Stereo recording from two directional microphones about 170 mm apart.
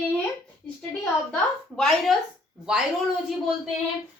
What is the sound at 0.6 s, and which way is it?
Speech, 5° left (ahead or behind).